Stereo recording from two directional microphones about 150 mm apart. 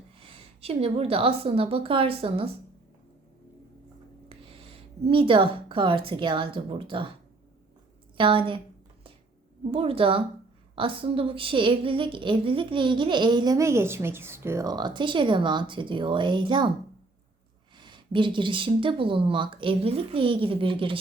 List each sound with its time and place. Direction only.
0.2 s speech: 40° right (ahead or behind)
4.3 s speech: 40° right (ahead or behind)
8.1 s speech: 35° right (ahead or behind)
9.7 s speech: 40° right (ahead or behind)
17.7 s speech: 30° right (ahead or behind)